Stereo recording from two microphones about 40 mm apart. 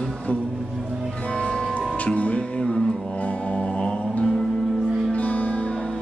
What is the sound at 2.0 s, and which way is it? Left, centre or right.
Music, left.